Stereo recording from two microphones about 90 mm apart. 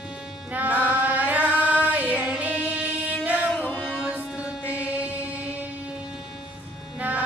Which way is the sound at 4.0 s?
10° right (ahead or behind).